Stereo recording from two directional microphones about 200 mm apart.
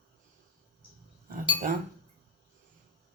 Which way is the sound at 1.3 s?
45° right (ahead or behind).